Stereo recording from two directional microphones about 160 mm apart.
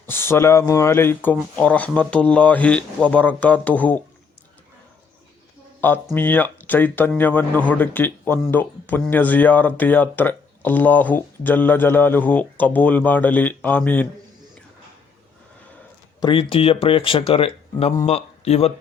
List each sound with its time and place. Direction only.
0.0 s speech: 15° left (ahead or behind)
5.8 s speech: 15° left (ahead or behind)
16.2 s a man's voice: 35° left (ahead or behind)